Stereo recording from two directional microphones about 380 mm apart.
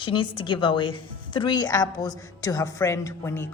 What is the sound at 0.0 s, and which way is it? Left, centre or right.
A woman's voice, centre.